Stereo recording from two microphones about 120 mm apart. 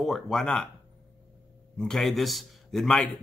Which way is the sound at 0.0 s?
Centre (ahead or behind).